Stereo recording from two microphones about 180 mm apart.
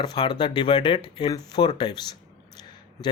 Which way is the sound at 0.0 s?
25° left (ahead or behind).